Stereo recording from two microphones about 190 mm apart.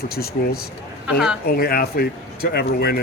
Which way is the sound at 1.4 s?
55° left (ahead or behind).